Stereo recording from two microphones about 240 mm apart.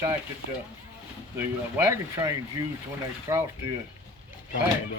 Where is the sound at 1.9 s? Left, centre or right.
Centre.